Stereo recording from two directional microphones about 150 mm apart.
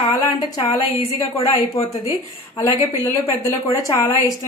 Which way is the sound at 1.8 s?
20° left (ahead or behind).